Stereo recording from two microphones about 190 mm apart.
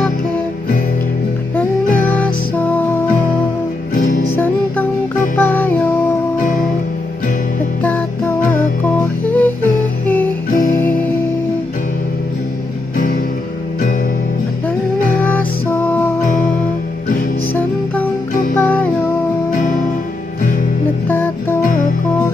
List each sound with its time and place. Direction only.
1.6 s music: 10° left (ahead or behind)
3.9 s music: 45° left (ahead or behind)
5.4 s music: 10° left (ahead or behind)
8.9 s music: 10° left (ahead or behind)
15.2 s music: 10° left (ahead or behind)
18.6 s music: 10° left (ahead or behind)
19.5 s music: 45° left (ahead or behind)
21.1 s music: 10° left (ahead or behind)